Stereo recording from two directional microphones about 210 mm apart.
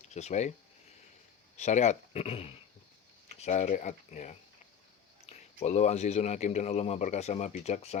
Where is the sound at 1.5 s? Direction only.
35° left (ahead or behind).